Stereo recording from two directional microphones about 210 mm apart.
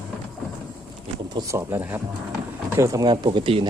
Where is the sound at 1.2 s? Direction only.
15° right (ahead or behind).